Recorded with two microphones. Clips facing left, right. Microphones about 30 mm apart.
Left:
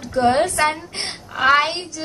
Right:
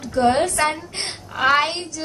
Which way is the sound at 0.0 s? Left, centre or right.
Centre.